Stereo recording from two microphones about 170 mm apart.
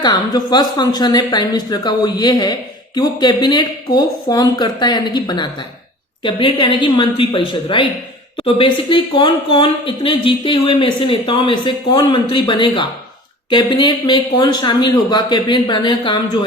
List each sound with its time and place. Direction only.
0.0 s a woman's voice: 25° left (ahead or behind)